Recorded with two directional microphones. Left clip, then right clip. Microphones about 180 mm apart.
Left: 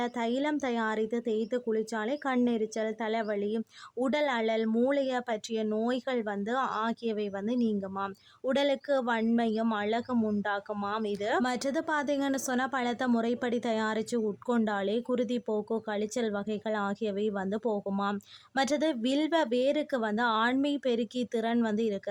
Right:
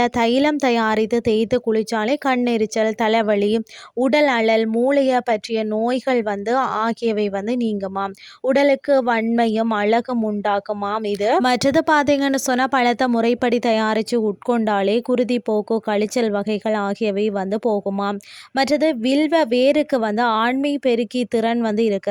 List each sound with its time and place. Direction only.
0.0 s speech: 50° right (ahead or behind)